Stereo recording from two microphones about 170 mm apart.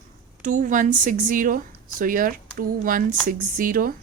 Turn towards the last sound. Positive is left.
turn(degrees=-55)  # may be behind; listen again after turning